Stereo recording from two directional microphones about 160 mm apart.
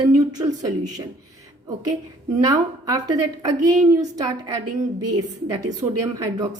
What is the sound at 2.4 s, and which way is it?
Speech, 20° right (ahead or behind).